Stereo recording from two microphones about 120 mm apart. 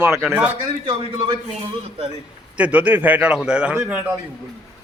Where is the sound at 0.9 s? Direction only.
45° right (ahead or behind).